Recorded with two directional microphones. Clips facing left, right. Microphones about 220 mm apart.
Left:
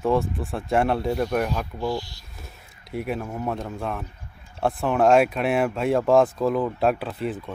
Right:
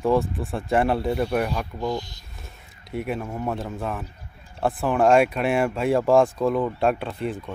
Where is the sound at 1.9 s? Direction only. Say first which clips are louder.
Even; 20° right (ahead or behind).